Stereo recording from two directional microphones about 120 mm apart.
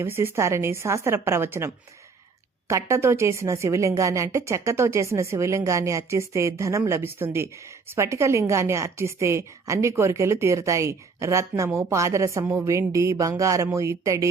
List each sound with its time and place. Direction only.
0.0 s a woman's voice: 20° right (ahead or behind)